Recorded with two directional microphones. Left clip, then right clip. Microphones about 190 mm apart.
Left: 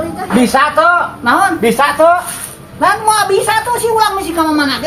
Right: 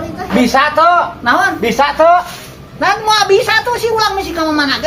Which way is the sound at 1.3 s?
10° right (ahead or behind).